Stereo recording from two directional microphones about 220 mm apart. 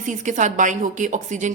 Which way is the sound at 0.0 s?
35° right (ahead or behind).